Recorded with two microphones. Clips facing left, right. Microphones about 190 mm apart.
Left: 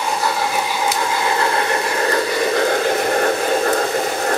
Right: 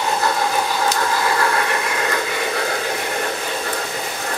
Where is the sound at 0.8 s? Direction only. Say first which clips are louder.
Even; 15° left (ahead or behind); by 2.6 s 35° left (ahead or behind).